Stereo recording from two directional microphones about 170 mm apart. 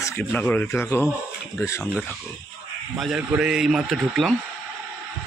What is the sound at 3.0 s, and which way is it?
A man's voice, 5° right (ahead or behind).